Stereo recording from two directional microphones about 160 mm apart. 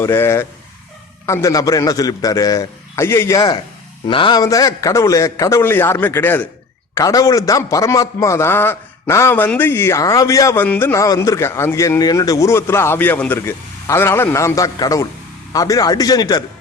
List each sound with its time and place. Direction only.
0.0 s a man's voice: 15° left (ahead or behind)
4.0 s a man's voice: 30° left (ahead or behind)